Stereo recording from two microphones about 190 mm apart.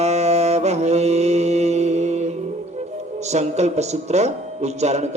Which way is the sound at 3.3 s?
35° right (ahead or behind).